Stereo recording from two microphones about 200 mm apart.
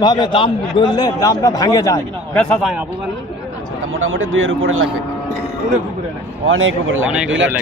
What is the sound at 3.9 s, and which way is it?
Speech, 90° right.